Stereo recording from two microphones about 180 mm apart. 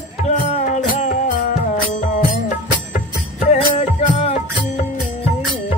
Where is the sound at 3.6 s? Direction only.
25° left (ahead or behind).